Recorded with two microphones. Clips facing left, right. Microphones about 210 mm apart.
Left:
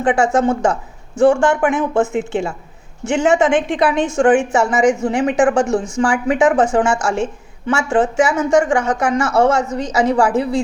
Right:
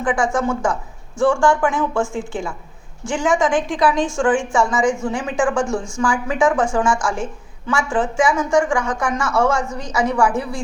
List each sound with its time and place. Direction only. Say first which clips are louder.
0.0 s speech: left 5 dB; 25° left (ahead or behind)
4.6 s a woman's voice: left 3 dB; 70° left (ahead or behind)
5.0 s speech: left 5 dB; 20° left (ahead or behind)